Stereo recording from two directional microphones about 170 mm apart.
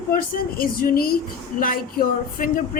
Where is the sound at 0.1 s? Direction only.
60° left (ahead or behind).